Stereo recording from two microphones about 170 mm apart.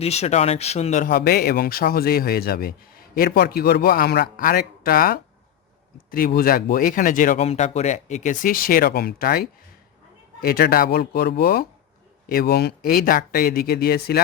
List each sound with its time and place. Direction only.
0.0 s speech: 40° left (ahead or behind)
7.3 s speech: 40° left (ahead or behind); by 14.2 s 65° left (ahead or behind)